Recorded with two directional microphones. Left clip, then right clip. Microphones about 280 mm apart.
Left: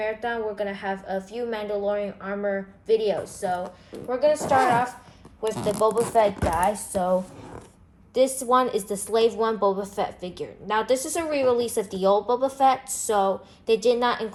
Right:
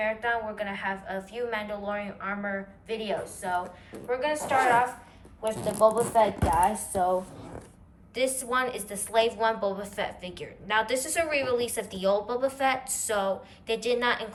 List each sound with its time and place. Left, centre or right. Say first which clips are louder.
0.0 s a woman's voice: left 1 dB; centre
5.5 s speech: even; centre
8.1 s a woman's voice: left 7 dB; centre